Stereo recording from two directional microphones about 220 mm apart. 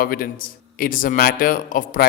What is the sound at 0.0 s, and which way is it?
A man's voice, 40° left (ahead or behind).